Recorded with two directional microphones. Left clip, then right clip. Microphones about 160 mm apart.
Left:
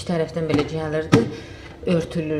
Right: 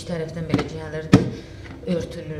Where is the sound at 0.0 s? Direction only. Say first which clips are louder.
Left 6 dB; 20° left (ahead or behind).